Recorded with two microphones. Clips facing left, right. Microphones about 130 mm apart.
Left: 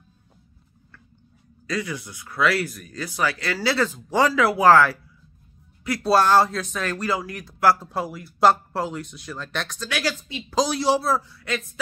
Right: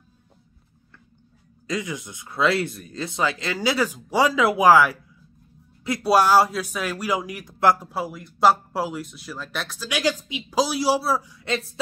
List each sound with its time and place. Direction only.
1.7 s a man's voice: 20° right (ahead or behind)
7.9 s speech: centre (ahead or behind)
9.8 s a man's voice: 15° right (ahead or behind)
11.4 s speech: 30° right (ahead or behind)